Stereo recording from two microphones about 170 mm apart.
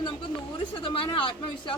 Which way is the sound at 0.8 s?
30° left (ahead or behind).